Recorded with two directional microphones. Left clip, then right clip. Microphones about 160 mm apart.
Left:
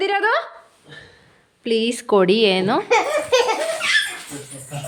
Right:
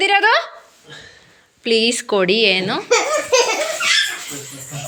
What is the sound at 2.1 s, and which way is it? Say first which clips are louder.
Speech: left 1 dB; 30° left (ahead or behind).